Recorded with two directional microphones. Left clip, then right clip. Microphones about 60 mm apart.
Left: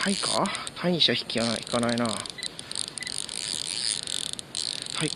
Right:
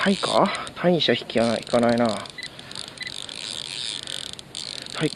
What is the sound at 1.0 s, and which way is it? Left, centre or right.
Camera, left.